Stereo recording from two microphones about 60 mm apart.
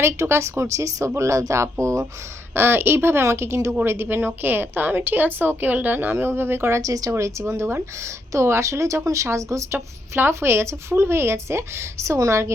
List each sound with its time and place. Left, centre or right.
0.0 s speech: right
2.6 s a woman's voice: right
6.8 s speech: right
7.1 s a woman's voice: right
9.7 s speech: right